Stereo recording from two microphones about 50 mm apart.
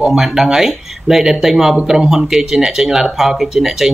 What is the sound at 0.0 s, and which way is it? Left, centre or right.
Speech, centre.